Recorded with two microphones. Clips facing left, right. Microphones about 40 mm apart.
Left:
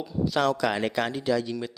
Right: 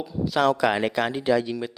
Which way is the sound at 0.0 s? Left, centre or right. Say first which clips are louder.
Right 3 dB; centre.